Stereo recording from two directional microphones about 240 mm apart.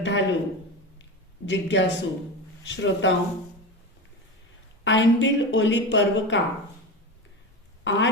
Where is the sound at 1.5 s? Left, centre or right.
Left.